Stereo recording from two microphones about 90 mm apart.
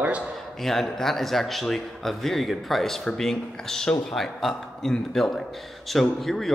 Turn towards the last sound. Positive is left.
turn(degrees=0)  # may be behind; listen again after turning